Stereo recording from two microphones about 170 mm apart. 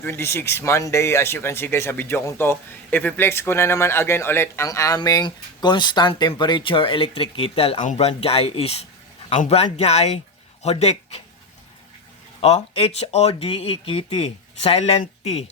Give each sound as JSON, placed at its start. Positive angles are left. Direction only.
{"t": 0.0, "sound": "speech", "side_deg": 15}
{"t": 12.4, "sound": "speech", "side_deg": 35}